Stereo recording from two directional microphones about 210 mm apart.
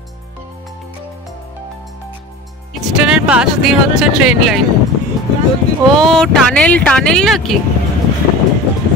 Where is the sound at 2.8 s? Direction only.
5° right (ahead or behind).